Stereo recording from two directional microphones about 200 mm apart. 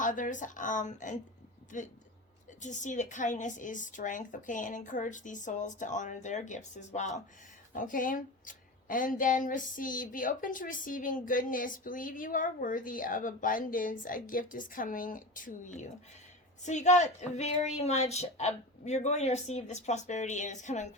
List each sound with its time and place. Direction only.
0.0 s a woman's voice: 40° left (ahead or behind)